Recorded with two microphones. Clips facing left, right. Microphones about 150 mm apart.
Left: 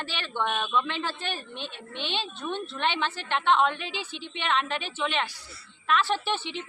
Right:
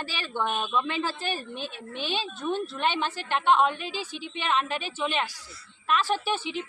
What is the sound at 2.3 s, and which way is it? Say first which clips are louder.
A woman's voice: right 3 dB; 10° right (ahead or behind).